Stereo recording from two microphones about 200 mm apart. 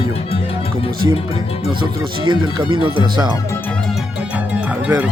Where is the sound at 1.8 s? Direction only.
25° right (ahead or behind).